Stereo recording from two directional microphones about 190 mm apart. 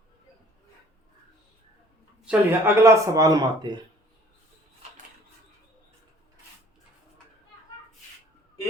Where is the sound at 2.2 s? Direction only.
10° right (ahead or behind).